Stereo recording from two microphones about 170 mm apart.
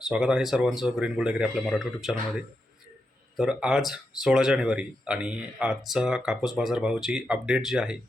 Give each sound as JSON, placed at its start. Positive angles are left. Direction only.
{"t": 0.0, "sound": "speech", "side_deg": -5}
{"t": 3.3, "sound": "speech", "side_deg": -5}